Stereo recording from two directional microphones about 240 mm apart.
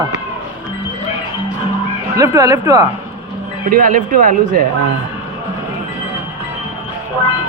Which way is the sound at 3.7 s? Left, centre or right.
Right.